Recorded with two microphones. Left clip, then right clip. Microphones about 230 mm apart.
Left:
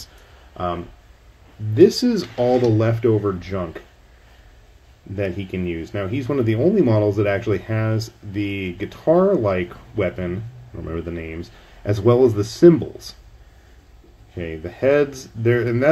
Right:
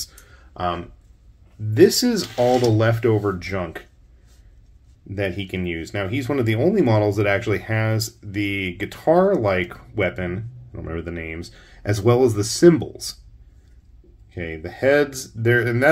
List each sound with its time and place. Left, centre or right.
1.8 s speech: centre
3.1 s speech: centre
3.3 s speech: centre
5.1 s speech: centre
14.3 s speech: centre